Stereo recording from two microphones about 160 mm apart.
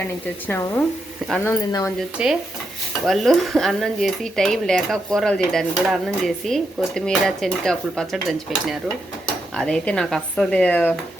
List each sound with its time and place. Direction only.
0.4 s speech: 15° left (ahead or behind)
2.0 s speech: 5° right (ahead or behind)